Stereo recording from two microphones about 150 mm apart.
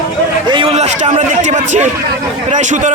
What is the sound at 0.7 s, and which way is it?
Speech, 50° right (ahead or behind).